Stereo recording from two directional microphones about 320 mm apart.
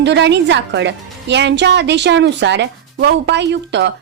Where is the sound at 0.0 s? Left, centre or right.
Right.